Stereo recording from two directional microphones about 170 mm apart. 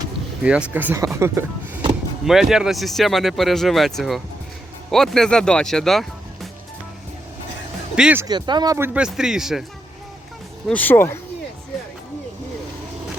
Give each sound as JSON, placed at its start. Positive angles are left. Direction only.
{"t": 0.4, "sound": "speech", "side_deg": -5}
{"t": 2.2, "sound": "speech", "side_deg": 0}
{"t": 7.9, "sound": "speech", "side_deg": -5}
{"t": 8.2, "sound": "speech", "side_deg": -25}
{"t": 8.9, "sound": "speech", "side_deg": -5}
{"t": 10.7, "sound": "speech", "side_deg": 10}